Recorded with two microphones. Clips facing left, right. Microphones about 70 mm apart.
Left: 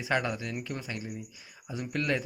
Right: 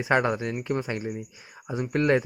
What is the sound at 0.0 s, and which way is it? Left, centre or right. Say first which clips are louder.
Speech: right 7 dB; right.